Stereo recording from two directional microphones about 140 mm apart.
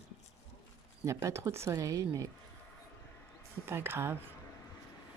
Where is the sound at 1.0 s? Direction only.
20° right (ahead or behind).